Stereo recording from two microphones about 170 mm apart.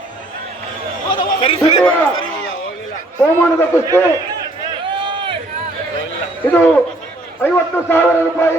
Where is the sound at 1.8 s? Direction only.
10° left (ahead or behind).